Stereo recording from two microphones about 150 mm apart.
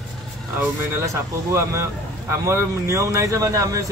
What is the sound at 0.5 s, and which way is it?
Speech, 20° right (ahead or behind).